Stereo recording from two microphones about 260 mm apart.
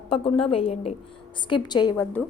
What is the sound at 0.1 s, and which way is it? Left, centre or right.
A woman's voice, left.